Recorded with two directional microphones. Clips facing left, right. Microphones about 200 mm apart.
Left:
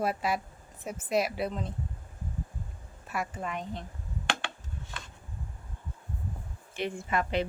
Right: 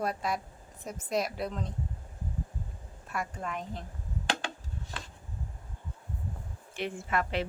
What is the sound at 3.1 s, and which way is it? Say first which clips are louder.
Speech: left 1 dB; 5° left (ahead or behind).